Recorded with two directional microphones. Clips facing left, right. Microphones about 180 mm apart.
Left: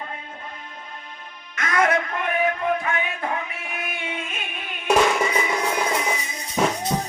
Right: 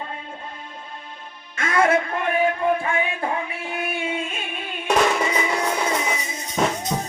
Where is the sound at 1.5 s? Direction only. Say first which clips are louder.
Right 2 dB; 30° right (ahead or behind).